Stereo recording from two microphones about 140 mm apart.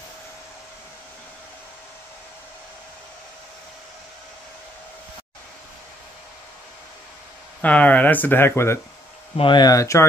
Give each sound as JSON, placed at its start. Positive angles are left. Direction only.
{"t": 7.6, "sound": "speech", "side_deg": 10}
{"t": 9.4, "sound": "speech", "side_deg": 30}